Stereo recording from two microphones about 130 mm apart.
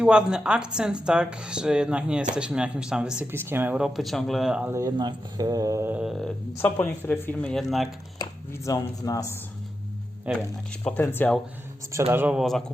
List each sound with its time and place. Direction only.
0.0 s speech: 5° right (ahead or behind)
3.8 s speech: centre (ahead or behind)
4.6 s speech: 20° right (ahead or behind)
4.9 s speech: 35° right (ahead or behind)
5.9 s speech: 5° right (ahead or behind)
6.6 s speech: 15° left (ahead or behind); by 7.9 s centre (ahead or behind)
8.2 s speech: 25° left (ahead or behind)
10.3 s speech: 10° right (ahead or behind)
10.7 s speech: 10° left (ahead or behind)
12.1 s speech: 15° right (ahead or behind)
12.4 s speech: centre (ahead or behind)